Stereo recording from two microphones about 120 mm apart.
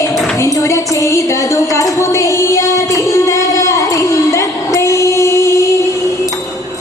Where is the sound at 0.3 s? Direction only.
25° left (ahead or behind).